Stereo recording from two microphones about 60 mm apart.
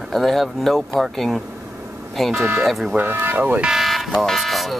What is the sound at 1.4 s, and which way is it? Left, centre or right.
Vehicle, right.